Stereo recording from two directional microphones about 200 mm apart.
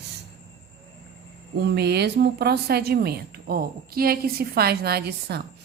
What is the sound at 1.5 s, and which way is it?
Speech, 55° right (ahead or behind).